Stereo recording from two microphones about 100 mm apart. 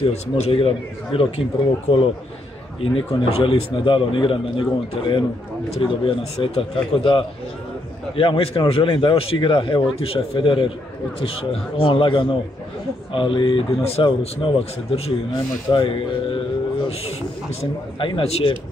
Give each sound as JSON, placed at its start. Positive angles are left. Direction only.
{"t": 0.0, "sound": "speech", "side_deg": 80}
{"t": 9.9, "sound": "speech", "side_deg": 65}
{"t": 11.1, "sound": "speech", "side_deg": 70}
{"t": 15.7, "sound": "a sound", "side_deg": 60}
{"t": 17.9, "sound": "speech", "side_deg": 60}